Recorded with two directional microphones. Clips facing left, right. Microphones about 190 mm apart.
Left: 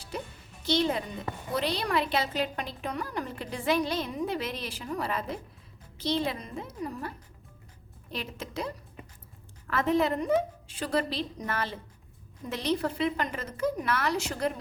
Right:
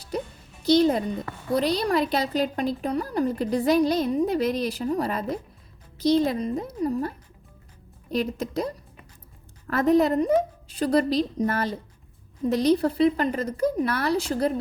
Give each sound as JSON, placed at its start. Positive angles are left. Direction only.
{"t": 0.1, "sound": "music", "side_deg": -40}
{"t": 0.6, "sound": "a child's voice", "side_deg": -40}
{"t": 8.1, "sound": "a woman's voice", "side_deg": -40}